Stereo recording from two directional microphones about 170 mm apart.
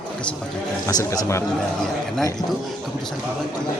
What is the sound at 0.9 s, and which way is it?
Speech, 20° left (ahead or behind).